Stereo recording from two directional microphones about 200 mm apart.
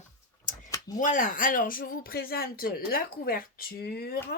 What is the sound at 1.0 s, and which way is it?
Speech, 40° left (ahead or behind).